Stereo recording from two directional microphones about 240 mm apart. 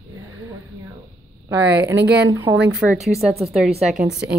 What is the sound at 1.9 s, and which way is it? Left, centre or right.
Speech, right.